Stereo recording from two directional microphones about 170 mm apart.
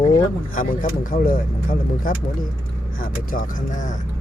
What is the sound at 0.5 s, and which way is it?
Speech, 55° left (ahead or behind).